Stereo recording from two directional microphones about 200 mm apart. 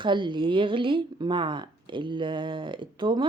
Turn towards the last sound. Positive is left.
turn(degrees=-25)  # may be behind; listen again after turning